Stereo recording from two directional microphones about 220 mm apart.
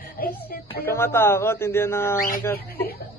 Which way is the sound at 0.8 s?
10° left (ahead or behind).